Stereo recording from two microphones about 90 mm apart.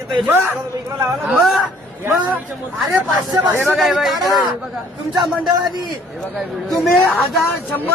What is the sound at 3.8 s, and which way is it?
Speech, centre (ahead or behind).